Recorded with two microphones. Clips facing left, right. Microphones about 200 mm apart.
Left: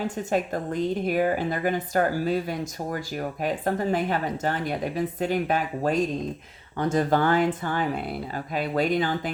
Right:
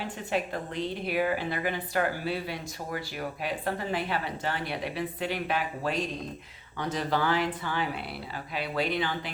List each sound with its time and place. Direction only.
0.0 s a woman's voice: 45° left (ahead or behind)